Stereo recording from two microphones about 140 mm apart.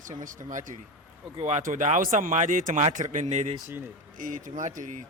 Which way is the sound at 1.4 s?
55° right (ahead or behind).